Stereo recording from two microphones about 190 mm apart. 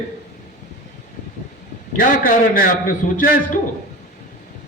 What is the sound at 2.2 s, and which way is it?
A man's voice, 45° left (ahead or behind).